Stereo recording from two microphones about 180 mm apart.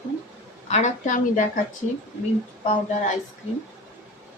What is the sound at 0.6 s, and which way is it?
Speech, 40° left (ahead or behind).